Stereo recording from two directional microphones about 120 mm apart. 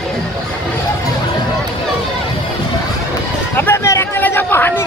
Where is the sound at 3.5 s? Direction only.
20° left (ahead or behind).